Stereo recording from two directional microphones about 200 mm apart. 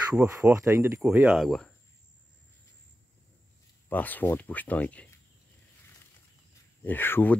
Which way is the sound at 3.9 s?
10° left (ahead or behind).